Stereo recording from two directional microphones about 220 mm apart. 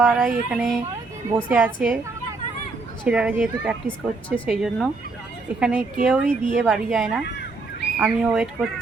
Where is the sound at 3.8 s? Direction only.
5° left (ahead or behind).